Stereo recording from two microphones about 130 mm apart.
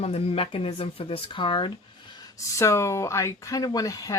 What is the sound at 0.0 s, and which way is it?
Speech, 50° left (ahead or behind).